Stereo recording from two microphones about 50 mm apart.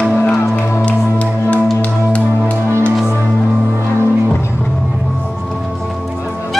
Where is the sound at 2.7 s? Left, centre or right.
Right.